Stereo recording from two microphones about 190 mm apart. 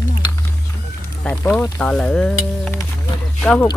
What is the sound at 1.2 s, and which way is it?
Speech, 10° left (ahead or behind).